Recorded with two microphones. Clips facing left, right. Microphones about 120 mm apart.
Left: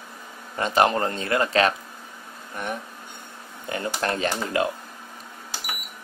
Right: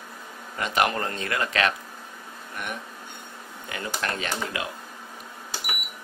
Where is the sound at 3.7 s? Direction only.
30° left (ahead or behind).